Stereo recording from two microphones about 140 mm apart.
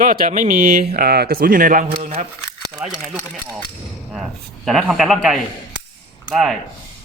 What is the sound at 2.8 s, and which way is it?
Speech, 10° right (ahead or behind).